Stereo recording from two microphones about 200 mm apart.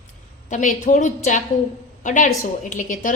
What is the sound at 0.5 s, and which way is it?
A woman's voice, 40° left (ahead or behind).